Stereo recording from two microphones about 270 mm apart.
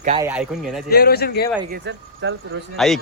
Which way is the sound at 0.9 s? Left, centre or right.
Left.